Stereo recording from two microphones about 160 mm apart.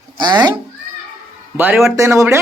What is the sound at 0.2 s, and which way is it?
Speech, 25° right (ahead or behind).